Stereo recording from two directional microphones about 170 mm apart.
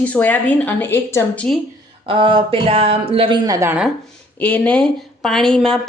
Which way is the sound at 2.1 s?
30° right (ahead or behind).